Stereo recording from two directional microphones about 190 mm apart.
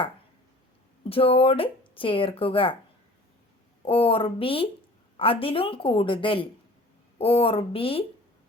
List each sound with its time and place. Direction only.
1.1 s speech: 30° left (ahead or behind)
3.8 s speech: 30° left (ahead or behind)